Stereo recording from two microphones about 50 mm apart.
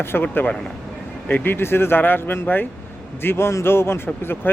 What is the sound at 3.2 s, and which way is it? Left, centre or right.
Speech, left.